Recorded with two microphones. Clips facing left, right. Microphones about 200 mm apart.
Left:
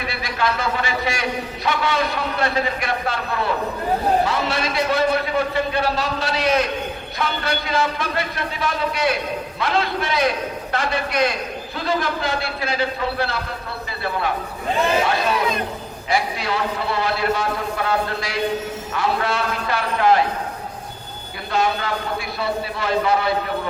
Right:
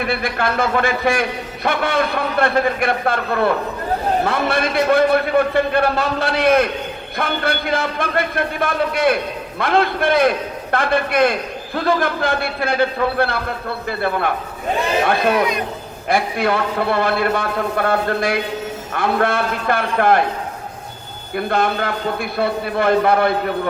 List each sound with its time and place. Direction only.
0.0 s a man's voice: 55° right (ahead or behind)
21.3 s a man's voice: 55° right (ahead or behind)